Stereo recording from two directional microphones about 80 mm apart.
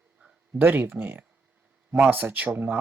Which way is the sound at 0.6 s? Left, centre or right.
Right.